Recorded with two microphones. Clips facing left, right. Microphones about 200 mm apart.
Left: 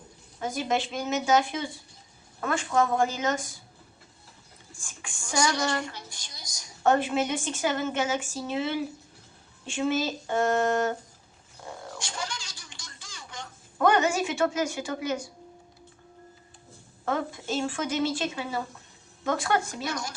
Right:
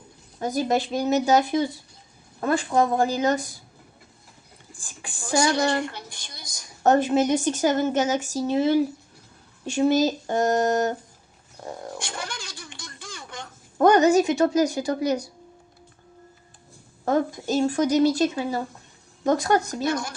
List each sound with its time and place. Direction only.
0.3 s a woman's voice: 40° right (ahead or behind)
4.8 s a woman's voice: 35° right (ahead or behind)
5.9 s a woman's voice: 60° right (ahead or behind); by 10.9 s 40° right (ahead or behind)
11.6 s roaring cats: 40° right (ahead or behind)
11.9 s a sound: 60° right (ahead or behind)
13.7 s a woman's voice: 40° right (ahead or behind)
17.1 s a woman's voice: 40° right (ahead or behind)
19.9 s speech: 55° right (ahead or behind)